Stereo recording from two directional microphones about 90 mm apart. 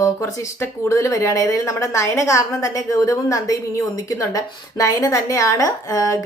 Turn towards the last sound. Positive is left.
turn(degrees=40)  # may be behind; listen again after turning